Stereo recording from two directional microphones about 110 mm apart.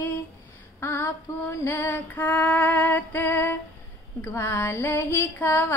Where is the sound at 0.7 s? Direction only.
25° left (ahead or behind).